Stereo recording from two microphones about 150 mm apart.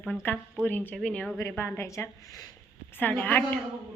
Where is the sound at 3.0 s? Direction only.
10° left (ahead or behind).